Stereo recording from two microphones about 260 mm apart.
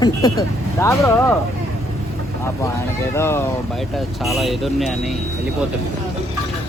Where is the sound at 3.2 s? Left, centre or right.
Centre.